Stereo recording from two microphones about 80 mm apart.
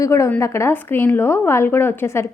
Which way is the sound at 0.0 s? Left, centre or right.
Left.